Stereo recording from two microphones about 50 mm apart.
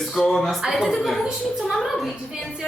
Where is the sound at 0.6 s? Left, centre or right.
Centre.